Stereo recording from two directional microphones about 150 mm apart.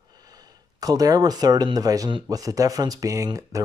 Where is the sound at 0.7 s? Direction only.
25° right (ahead or behind).